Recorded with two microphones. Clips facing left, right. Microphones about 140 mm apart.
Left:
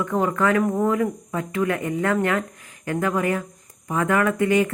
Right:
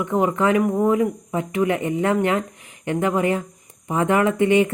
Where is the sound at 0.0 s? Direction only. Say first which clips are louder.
Right 2 dB; 20° right (ahead or behind).